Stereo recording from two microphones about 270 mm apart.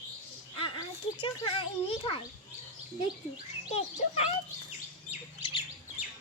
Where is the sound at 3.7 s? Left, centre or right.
Left.